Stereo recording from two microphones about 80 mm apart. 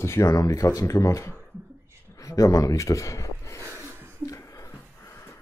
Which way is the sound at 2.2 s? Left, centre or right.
Left.